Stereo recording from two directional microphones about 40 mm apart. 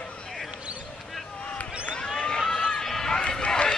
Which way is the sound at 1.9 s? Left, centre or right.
Centre.